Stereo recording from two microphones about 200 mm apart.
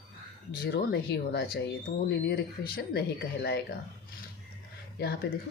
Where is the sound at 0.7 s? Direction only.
55° left (ahead or behind).